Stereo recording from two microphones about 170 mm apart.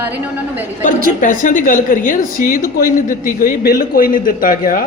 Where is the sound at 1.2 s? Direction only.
50° left (ahead or behind).